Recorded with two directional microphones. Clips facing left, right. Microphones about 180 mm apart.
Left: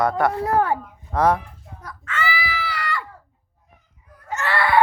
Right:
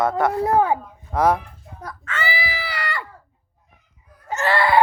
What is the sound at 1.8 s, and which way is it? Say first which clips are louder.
Chicken: even; 30° right (ahead or behind).